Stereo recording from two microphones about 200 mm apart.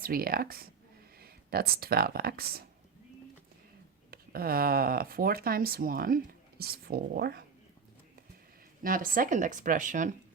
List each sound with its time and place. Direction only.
0.0 s speech: 50° right (ahead or behind)
4.1 s speech: 50° right (ahead or behind)
8.8 s speech: 45° right (ahead or behind)